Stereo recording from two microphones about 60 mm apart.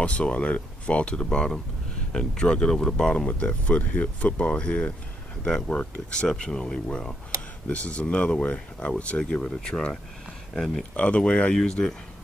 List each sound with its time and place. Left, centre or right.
0.0 s speech: centre
11.0 s speech: centre